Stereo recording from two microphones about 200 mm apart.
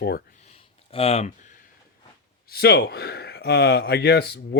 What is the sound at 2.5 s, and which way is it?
Speech, 55° left (ahead or behind).